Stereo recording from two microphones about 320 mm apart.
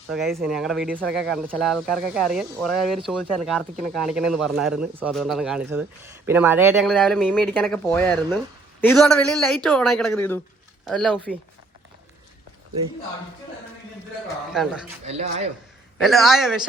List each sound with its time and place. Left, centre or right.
0.1 s speech: centre
14.5 s speech: centre
15.0 s speech: centre
16.0 s speech: centre